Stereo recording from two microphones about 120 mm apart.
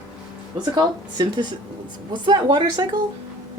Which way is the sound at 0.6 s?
35° right (ahead or behind).